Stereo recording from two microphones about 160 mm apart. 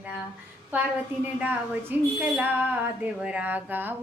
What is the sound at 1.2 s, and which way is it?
A woman's voice, 10° right (ahead or behind).